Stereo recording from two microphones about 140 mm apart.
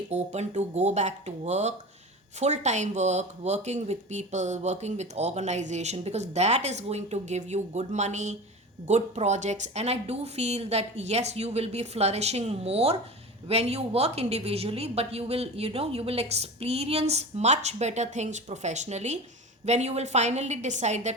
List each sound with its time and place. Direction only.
0.1 s a woman's voice: 55° right (ahead or behind)